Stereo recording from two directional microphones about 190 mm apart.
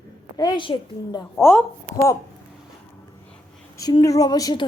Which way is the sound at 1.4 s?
10° left (ahead or behind).